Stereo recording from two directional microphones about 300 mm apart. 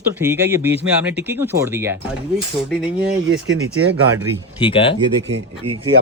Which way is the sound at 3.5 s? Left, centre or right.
Right.